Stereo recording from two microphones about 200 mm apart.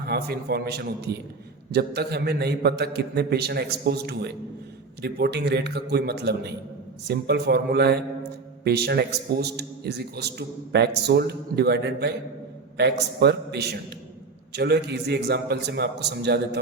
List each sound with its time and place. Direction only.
0.1 s a man's voice: 55° right (ahead or behind)